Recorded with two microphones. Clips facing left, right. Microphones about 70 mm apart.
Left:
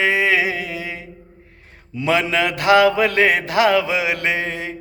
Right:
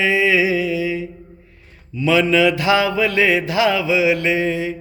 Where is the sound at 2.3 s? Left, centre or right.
Left.